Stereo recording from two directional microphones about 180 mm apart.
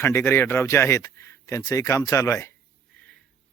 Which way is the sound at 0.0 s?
15° left (ahead or behind).